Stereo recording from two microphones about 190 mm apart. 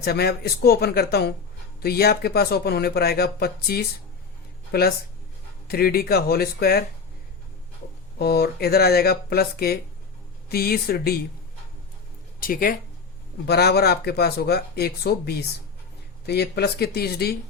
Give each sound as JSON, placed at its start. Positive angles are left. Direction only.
{"t": 0.0, "sound": "speech", "side_deg": 55}
{"t": 8.2, "sound": "speech", "side_deg": 55}
{"t": 12.4, "sound": "speech", "side_deg": 50}